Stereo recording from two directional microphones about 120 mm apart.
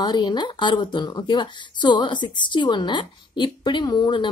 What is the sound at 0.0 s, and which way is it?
A woman's voice, 40° left (ahead or behind).